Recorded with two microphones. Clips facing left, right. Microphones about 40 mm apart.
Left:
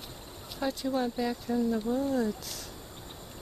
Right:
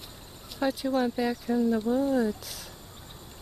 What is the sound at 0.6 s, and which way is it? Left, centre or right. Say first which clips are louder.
Speech: right 4 dB; centre.